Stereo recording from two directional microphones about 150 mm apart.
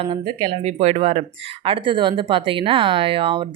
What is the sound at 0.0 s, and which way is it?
Speech, 30° right (ahead or behind).